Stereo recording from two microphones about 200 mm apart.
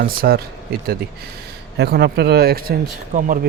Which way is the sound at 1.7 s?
55° right (ahead or behind).